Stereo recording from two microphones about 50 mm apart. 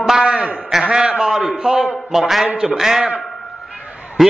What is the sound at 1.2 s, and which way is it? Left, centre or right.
A man's voice, centre.